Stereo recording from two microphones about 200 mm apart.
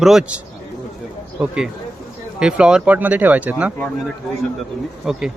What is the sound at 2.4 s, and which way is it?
Speech, 5° right (ahead or behind).